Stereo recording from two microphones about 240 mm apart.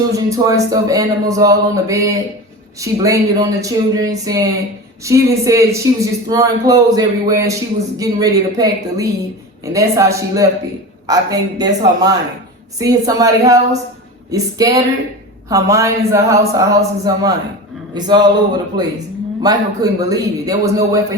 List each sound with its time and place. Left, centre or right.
0.3 s a man's voice: centre